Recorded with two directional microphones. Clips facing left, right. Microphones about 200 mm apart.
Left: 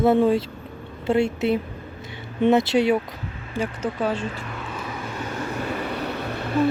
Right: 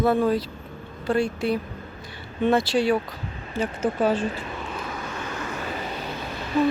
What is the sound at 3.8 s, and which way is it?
Speech, 5° right (ahead or behind).